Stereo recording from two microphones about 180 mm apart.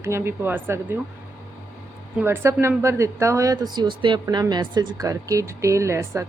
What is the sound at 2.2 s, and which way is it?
Speech, 15° right (ahead or behind).